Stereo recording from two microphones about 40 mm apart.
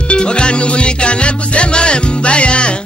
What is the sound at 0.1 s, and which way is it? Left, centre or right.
Music, left.